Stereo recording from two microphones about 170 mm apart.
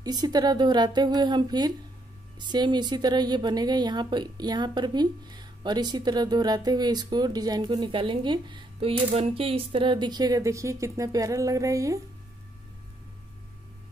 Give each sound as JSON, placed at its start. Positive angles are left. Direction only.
{"t": 0.0, "sound": "a woman's voice", "side_deg": -25}